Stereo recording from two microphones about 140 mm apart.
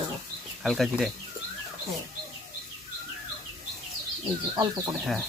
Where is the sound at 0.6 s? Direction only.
Centre (ahead or behind).